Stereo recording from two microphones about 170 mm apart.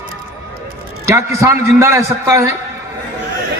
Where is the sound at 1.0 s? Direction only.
15° right (ahead or behind).